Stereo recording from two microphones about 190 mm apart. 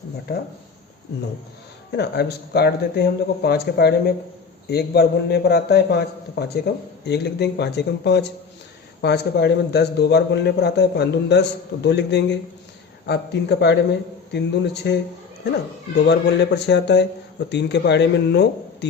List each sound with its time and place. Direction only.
0.3 s a man's voice: 55° left (ahead or behind)
1.9 s a man's voice: 60° left (ahead or behind)
16.0 s a man's voice: 65° left (ahead or behind)